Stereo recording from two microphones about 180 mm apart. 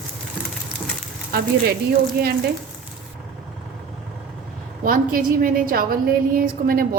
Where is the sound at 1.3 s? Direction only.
60° right (ahead or behind).